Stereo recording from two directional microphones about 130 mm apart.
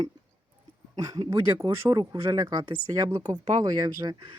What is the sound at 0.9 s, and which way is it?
Speech, 30° right (ahead or behind).